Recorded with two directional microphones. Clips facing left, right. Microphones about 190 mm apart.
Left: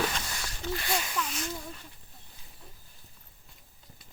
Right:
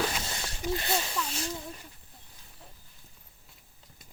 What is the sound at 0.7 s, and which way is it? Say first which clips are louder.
Speech: right 2 dB; 25° right (ahead or behind).